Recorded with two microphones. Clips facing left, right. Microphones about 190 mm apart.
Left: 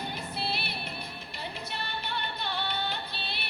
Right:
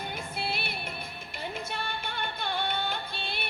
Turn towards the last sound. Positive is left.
turn(degrees=-50)  # may be behind; listen again after turning